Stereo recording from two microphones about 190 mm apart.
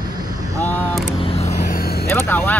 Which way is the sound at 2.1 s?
10° left (ahead or behind).